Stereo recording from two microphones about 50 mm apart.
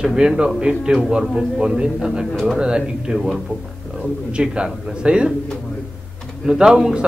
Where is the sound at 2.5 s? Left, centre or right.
Centre.